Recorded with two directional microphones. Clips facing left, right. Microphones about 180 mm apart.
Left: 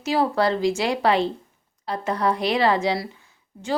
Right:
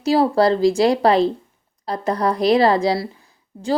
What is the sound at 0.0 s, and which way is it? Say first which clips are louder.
Speech: right 5 dB; 35° right (ahead or behind).